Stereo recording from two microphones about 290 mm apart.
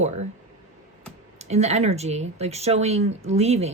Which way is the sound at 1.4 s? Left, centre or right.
Right.